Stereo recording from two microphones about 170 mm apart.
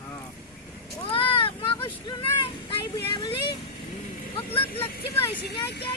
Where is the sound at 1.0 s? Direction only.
30° left (ahead or behind).